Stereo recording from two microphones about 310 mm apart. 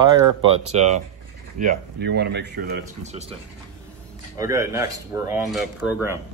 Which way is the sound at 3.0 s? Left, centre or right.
Right.